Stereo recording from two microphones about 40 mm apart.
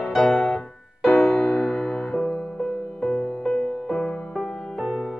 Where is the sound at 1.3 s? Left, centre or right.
Left.